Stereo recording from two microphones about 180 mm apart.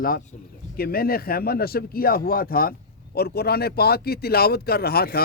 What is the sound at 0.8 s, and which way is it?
A man's voice, 55° left (ahead or behind).